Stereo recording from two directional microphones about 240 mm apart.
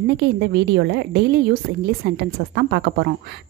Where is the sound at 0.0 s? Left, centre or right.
Right.